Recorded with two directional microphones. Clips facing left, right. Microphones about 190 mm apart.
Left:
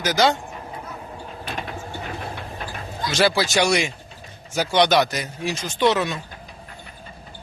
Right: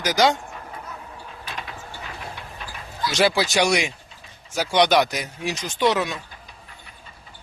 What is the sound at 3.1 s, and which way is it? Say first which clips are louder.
Speech: even; 15° right (ahead or behind).